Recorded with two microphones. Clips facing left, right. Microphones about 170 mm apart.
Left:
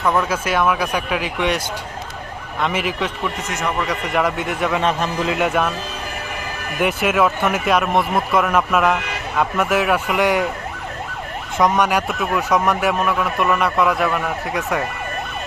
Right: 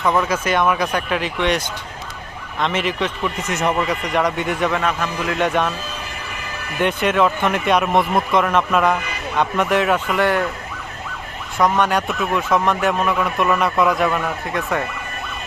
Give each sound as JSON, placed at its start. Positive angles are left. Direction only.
{"t": 0.0, "sound": "a man's voice", "side_deg": 0}
{"t": 4.8, "sound": "a man's voice", "side_deg": 30}
{"t": 5.3, "sound": "speech", "side_deg": 5}
{"t": 6.7, "sound": "a man's voice", "side_deg": 5}
{"t": 11.5, "sound": "a man's voice", "side_deg": 15}